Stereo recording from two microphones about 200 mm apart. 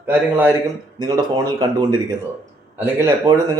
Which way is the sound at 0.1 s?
10° right (ahead or behind).